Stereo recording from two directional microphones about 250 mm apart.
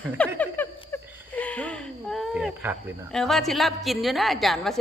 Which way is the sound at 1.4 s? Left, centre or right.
Centre.